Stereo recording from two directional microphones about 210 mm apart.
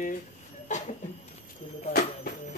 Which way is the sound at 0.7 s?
35° left (ahead or behind).